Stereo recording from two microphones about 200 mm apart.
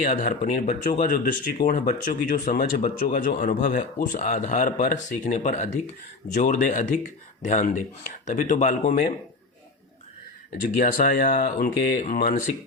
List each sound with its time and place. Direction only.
0.0 s speech: 40° left (ahead or behind)
10.8 s speech: 45° left (ahead or behind)